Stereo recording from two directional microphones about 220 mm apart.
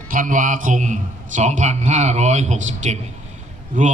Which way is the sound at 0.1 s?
35° right (ahead or behind).